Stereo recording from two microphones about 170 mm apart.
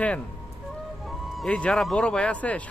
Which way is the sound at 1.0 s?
Centre (ahead or behind).